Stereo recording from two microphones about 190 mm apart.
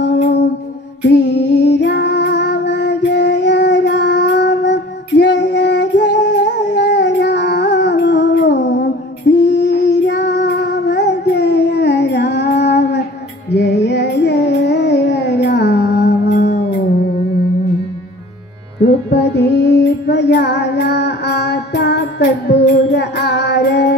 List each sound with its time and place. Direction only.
0.0 s music: 65° left (ahead or behind)
9.3 s child singing: 65° left (ahead or behind)
13.5 s carnatic music: 65° left (ahead or behind)
18.9 s music: 60° left (ahead or behind)